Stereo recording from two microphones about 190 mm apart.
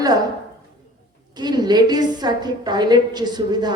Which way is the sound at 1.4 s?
20° right (ahead or behind).